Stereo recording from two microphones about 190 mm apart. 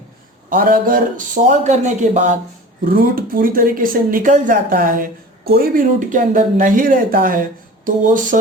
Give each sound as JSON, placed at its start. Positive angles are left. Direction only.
{"t": 0.5, "sound": "speech", "side_deg": -50}